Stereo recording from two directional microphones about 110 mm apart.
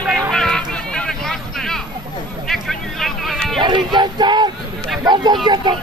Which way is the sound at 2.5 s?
5° left (ahead or behind).